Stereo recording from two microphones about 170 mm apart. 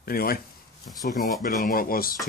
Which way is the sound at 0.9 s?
50° left (ahead or behind).